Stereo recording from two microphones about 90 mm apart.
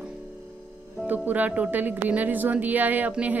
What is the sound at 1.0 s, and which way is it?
Speech, 20° right (ahead or behind).